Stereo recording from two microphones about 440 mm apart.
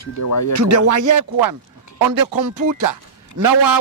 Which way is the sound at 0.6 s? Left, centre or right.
Right.